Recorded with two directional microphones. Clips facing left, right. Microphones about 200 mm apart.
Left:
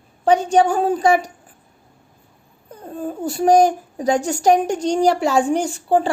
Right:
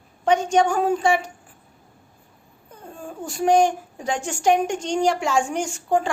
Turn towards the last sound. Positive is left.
turn(degrees=35)  # may be behind; listen again after turning